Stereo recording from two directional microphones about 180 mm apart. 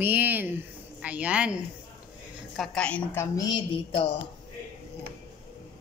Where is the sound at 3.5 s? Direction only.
25° left (ahead or behind).